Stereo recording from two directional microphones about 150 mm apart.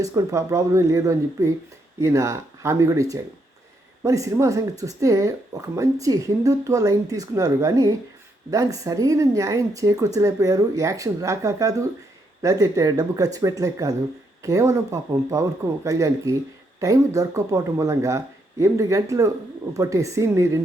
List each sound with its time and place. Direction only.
0.0 s speech: 20° right (ahead or behind)